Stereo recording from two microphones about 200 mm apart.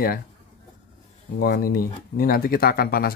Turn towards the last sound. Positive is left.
turn(degrees=50)  # may be behind; listen again after turning